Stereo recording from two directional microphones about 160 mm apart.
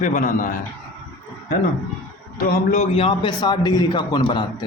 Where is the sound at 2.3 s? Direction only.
60° left (ahead or behind).